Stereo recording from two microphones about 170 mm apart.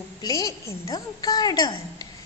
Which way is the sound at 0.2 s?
20° left (ahead or behind).